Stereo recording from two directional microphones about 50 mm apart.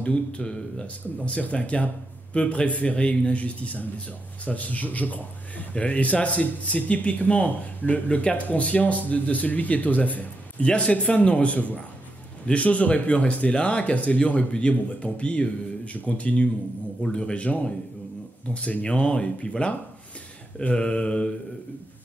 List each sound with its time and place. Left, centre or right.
0.0 s speech: left